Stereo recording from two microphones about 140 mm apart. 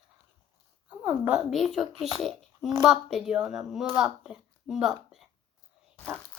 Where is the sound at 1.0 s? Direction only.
10° right (ahead or behind).